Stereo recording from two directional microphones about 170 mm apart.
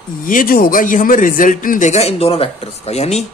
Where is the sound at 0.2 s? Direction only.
55° left (ahead or behind).